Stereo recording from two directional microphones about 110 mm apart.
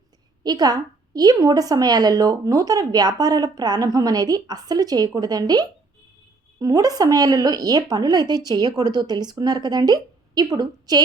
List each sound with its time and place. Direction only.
0.4 s a woman's voice: 35° right (ahead or behind)